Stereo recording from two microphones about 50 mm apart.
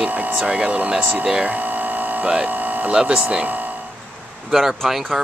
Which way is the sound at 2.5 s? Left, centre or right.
Right.